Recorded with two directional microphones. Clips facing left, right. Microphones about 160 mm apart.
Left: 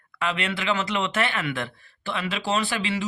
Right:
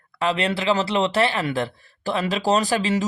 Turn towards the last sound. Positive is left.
turn(degrees=-40)  # may be behind; listen again after turning